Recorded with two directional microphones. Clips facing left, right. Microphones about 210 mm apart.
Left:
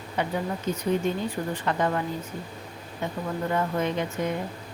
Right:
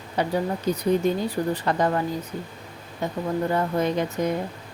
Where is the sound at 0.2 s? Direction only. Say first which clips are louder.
Right 4 dB; 35° right (ahead or behind).